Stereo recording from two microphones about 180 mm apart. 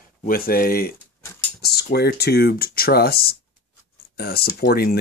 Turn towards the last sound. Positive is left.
turn(degrees=60)  # may be behind; listen again after turning